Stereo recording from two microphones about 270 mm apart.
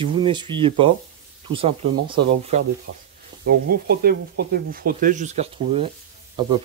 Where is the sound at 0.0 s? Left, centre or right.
Centre.